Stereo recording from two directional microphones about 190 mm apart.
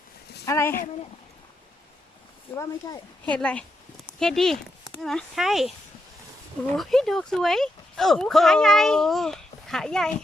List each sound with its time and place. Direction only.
0.4 s speech: 15° left (ahead or behind)
2.6 s speech: 20° left (ahead or behind)
3.2 s speech: 5° left (ahead or behind)
6.7 s speech: centre (ahead or behind)